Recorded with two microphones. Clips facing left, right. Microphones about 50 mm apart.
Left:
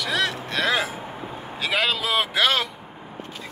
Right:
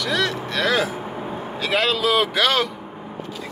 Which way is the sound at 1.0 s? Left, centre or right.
Centre.